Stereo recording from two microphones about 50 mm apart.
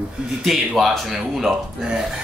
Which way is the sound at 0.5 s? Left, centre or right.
Centre.